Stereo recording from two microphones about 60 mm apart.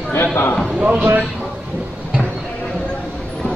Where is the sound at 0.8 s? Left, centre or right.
Right.